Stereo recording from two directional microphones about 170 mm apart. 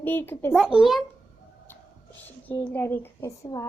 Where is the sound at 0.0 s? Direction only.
10° left (ahead or behind).